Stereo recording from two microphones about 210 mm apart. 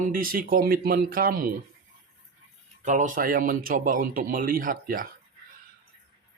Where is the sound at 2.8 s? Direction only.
35° right (ahead or behind).